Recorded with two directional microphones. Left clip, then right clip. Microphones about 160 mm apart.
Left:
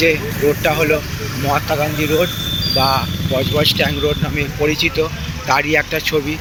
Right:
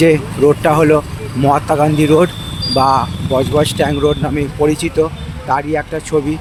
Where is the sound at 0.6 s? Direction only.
45° right (ahead or behind).